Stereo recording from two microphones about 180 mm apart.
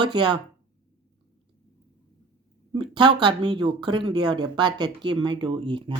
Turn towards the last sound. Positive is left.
turn(degrees=-30)  # may be behind; listen again after turning